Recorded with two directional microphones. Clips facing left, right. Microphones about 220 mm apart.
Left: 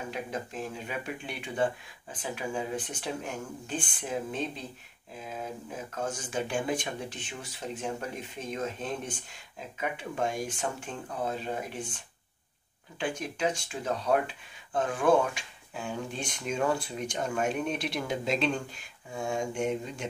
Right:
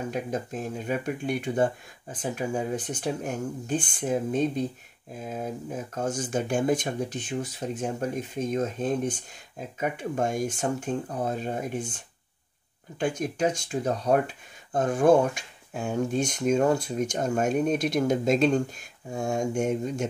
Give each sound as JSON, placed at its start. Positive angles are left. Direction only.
{"t": 0.1, "sound": "speech", "side_deg": -45}
{"t": 13.0, "sound": "speech", "side_deg": -45}